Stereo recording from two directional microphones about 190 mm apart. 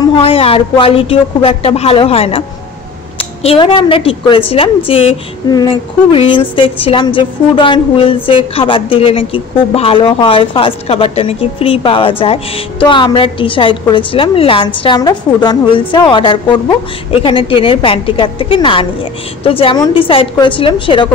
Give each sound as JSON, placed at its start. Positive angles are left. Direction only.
{"t": 0.0, "sound": "a woman's voice", "side_deg": 30}